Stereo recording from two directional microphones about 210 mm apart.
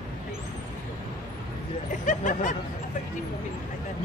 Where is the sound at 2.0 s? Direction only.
35° left (ahead or behind).